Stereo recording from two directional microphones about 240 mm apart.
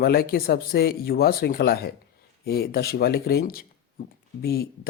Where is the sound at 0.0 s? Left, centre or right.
Left.